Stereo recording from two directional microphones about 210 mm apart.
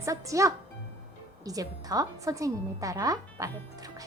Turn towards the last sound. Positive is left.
turn(degrees=-15)  # may be behind; listen again after turning